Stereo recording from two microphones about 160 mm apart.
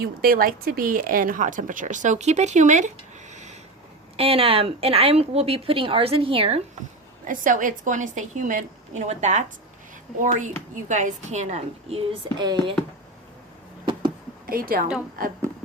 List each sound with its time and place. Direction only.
0.0 s speech: 65° right (ahead or behind); by 3.6 s 45° right (ahead or behind)
4.2 s speech: 35° right (ahead or behind)
7.3 s speech: 55° right (ahead or behind)
12.4 s speech: 30° right (ahead or behind)
14.4 s a woman's voice: 65° right (ahead or behind)